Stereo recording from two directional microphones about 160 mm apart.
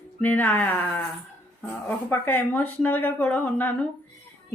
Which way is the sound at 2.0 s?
10° left (ahead or behind).